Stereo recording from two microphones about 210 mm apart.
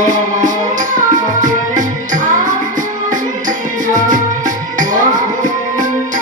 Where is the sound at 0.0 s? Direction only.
40° right (ahead or behind).